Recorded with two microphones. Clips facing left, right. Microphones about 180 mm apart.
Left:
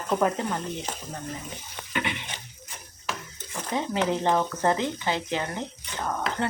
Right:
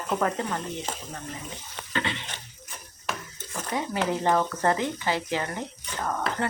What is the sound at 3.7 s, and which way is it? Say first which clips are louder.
Speech: left 1 dB; 20° left (ahead or behind).